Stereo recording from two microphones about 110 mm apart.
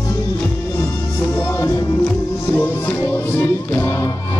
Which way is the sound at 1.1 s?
20° left (ahead or behind).